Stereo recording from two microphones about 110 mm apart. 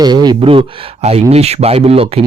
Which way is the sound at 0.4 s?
55° right (ahead or behind).